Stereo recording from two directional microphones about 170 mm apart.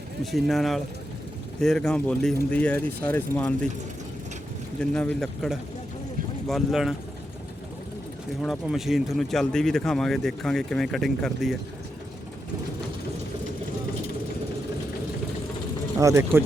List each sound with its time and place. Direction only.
0.3 s speech: centre (ahead or behind)
4.8 s speech: 5° left (ahead or behind)
8.4 s speech: centre (ahead or behind)
16.0 s speech: 15° right (ahead or behind)